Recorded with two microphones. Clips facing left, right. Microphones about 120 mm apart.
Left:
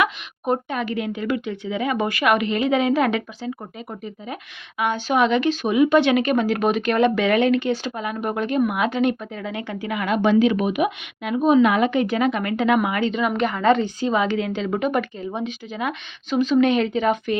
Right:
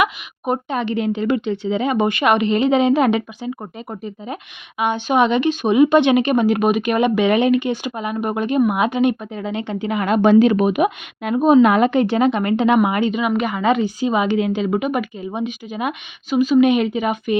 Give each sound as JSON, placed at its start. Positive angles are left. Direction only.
{"t": 0.0, "sound": "a sound", "side_deg": -15}
{"t": 0.8, "sound": "speech", "side_deg": -25}
{"t": 4.8, "sound": "speech", "side_deg": -20}
{"t": 10.0, "sound": "a woman's voice", "side_deg": -40}
{"t": 13.1, "sound": "a woman's voice", "side_deg": -10}